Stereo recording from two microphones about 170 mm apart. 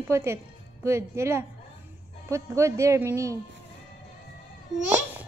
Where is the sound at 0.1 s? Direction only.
15° right (ahead or behind).